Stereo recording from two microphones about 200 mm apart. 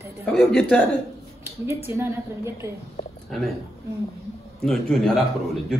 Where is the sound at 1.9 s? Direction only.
10° right (ahead or behind).